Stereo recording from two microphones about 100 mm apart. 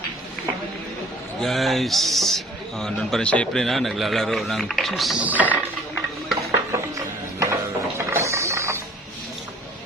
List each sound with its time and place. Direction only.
1.4 s a man's voice: centre (ahead or behind)
5.2 s speech: 15° right (ahead or behind)
6.5 s printer: 30° right (ahead or behind)